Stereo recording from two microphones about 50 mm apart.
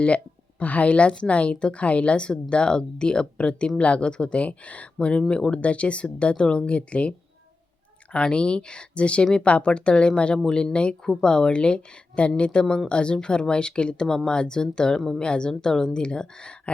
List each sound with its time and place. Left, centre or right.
0.6 s speech: left
8.1 s speech: centre